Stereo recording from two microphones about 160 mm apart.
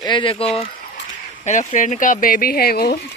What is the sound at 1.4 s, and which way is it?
Speech, 50° left (ahead or behind).